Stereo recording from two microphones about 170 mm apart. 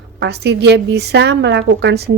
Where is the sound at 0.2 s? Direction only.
75° right (ahead or behind).